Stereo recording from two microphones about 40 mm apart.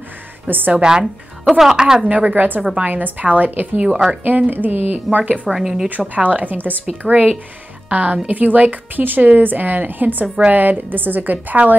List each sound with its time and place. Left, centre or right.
0.5 s a woman's voice: right
0.8 s speech: centre
1.5 s a woman's voice: centre
1.8 s a woman's voice: centre
2.0 s a woman's voice: right
3.8 s a woman's voice: right
4.5 s a woman's voice: right
5.5 s speech: centre
5.9 s a woman's voice: right
10.2 s a woman's voice: right
10.5 s a woman's voice: right